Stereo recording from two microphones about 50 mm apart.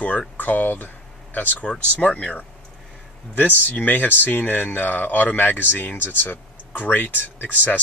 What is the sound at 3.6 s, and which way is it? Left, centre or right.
Speech, left.